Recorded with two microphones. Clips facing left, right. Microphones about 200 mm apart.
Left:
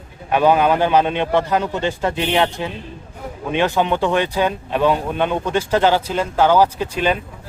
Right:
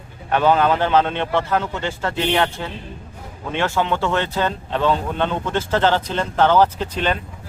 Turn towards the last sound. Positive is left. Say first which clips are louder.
# left 3 dB
turn(degrees=10)  # may be behind; listen again after turning